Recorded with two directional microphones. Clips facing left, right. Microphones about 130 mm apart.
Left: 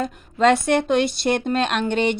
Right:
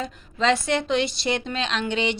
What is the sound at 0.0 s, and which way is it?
A woman's voice, 55° left (ahead or behind).